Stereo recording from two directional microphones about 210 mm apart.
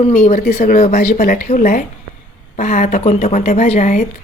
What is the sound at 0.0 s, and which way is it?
Speech, 35° left (ahead or behind).